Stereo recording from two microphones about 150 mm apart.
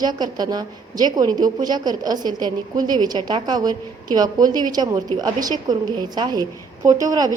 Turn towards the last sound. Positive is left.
turn(degrees=-25)  # may be behind; listen again after turning